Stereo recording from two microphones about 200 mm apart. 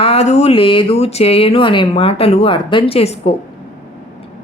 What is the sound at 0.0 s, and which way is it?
Speech, 30° left (ahead or behind).